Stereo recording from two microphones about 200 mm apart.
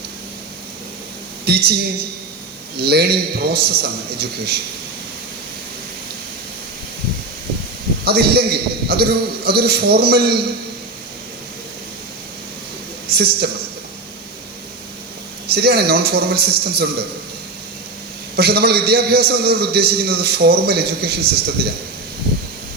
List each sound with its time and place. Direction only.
1.5 s a man's voice: 50° right (ahead or behind)
8.0 s a man's voice: 50° right (ahead or behind)
13.1 s a man's voice: 55° right (ahead or behind)
15.4 s a man's voice: 50° right (ahead or behind)
18.3 s a man's voice: 50° right (ahead or behind)